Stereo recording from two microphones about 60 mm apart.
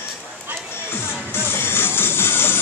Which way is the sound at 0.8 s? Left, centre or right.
Left.